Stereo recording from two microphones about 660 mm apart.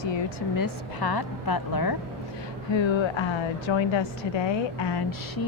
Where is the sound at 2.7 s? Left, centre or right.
Left.